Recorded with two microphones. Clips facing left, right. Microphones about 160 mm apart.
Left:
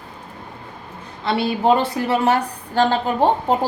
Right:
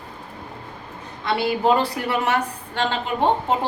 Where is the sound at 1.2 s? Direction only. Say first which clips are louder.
Left 2 dB; 25° left (ahead or behind).